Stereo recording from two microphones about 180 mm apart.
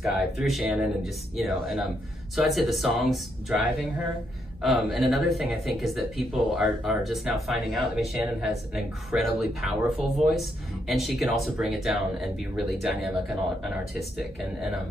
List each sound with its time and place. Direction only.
0.0 s speech: centre (ahead or behind)
4.6 s speech: centre (ahead or behind)